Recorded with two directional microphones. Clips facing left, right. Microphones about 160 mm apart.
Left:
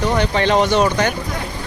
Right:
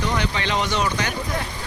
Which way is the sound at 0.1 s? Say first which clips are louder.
Left 8 dB; 45° left (ahead or behind).